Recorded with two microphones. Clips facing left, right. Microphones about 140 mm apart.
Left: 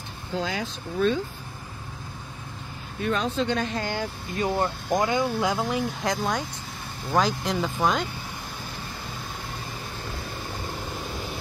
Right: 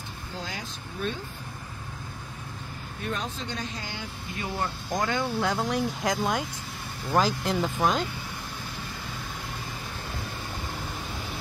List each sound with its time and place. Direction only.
0.4 s speech: 70° left (ahead or behind)
3.2 s speech: 65° left (ahead or behind); by 4.9 s 40° left (ahead or behind)
4.9 s speech: 20° left (ahead or behind)
5.2 s speech: 10° left (ahead or behind)